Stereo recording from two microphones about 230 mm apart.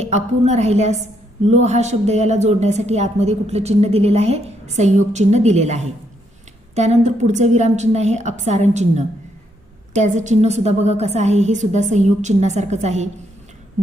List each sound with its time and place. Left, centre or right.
0.0 s a woman's voice: right